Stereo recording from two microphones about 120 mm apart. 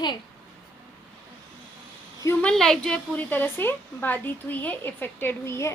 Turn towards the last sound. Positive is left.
turn(degrees=20)  # may be behind; listen again after turning